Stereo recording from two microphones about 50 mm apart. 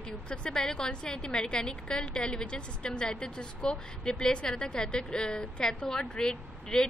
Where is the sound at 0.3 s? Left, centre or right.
Centre.